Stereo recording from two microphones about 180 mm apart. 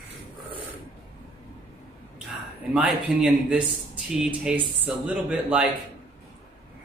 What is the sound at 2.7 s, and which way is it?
Speech, 5° right (ahead or behind).